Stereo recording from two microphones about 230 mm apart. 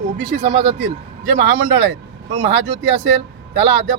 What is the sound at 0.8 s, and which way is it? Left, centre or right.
Speech, right.